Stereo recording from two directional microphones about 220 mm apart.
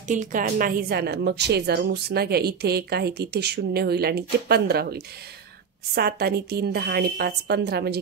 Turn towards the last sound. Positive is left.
turn(degrees=-45)  # may be behind; listen again after turning